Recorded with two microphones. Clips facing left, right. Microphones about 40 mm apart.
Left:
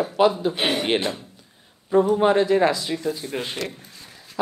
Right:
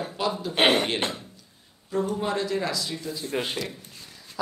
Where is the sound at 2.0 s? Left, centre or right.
Left.